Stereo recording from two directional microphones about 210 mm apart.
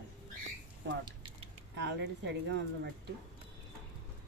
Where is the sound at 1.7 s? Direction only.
60° right (ahead or behind).